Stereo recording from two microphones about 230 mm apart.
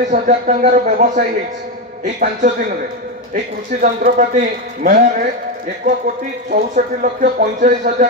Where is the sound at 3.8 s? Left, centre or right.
Right.